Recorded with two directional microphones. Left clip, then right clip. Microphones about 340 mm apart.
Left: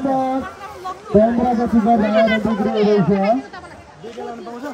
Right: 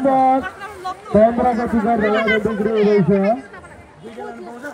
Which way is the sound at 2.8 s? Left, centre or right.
Centre.